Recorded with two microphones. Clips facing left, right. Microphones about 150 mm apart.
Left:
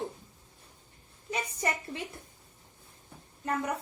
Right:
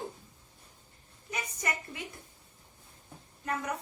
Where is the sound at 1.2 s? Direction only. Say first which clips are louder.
Left 4 dB; 30° left (ahead or behind).